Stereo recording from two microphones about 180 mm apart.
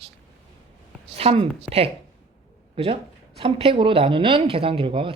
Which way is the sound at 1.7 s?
5° right (ahead or behind).